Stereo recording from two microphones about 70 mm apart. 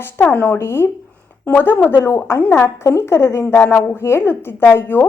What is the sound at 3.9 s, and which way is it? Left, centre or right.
A woman's voice, left.